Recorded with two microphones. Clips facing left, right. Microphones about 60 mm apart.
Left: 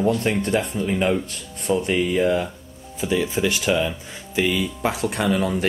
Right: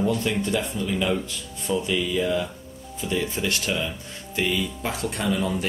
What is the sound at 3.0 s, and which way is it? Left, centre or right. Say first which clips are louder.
Speech: left 5 dB; left.